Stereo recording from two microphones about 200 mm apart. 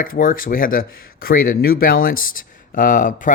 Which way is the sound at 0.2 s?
45° left (ahead or behind).